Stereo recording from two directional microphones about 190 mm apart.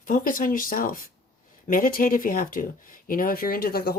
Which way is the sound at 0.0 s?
45° left (ahead or behind).